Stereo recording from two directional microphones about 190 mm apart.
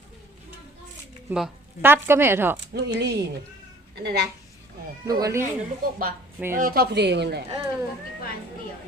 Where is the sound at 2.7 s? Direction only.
65° right (ahead or behind).